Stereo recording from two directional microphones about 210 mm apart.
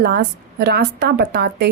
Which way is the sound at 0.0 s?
50° right (ahead or behind).